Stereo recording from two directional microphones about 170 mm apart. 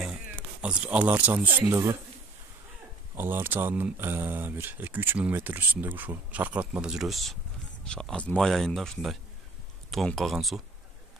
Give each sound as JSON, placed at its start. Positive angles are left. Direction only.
{"t": 0.6, "sound": "speech", "side_deg": -5}
{"t": 3.2, "sound": "speech", "side_deg": -15}